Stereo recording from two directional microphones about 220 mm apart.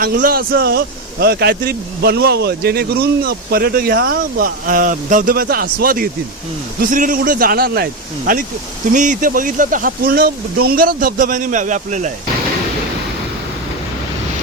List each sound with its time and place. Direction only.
0.0 s speech: 40° right (ahead or behind)
8.9 s speech: 35° right (ahead or behind)